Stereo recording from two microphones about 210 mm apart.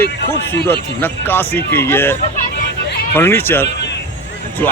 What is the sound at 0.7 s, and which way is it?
Speech, 10° left (ahead or behind).